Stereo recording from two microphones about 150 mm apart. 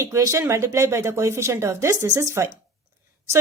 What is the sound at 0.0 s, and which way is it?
A woman's voice, 20° right (ahead or behind).